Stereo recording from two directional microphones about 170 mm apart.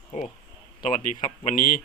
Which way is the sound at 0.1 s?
45° left (ahead or behind).